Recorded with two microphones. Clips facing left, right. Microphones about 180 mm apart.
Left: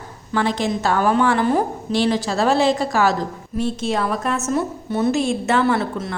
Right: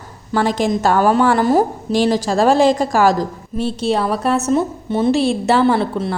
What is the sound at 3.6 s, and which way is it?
A woman's voice, 30° right (ahead or behind).